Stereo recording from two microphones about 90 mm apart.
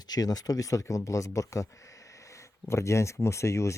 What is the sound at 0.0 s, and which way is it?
Speech, 45° left (ahead or behind).